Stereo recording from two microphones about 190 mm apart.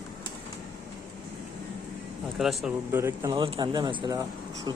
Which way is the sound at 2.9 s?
15° right (ahead or behind).